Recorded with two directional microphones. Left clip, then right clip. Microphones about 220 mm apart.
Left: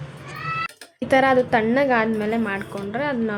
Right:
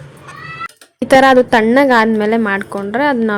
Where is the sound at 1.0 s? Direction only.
35° right (ahead or behind).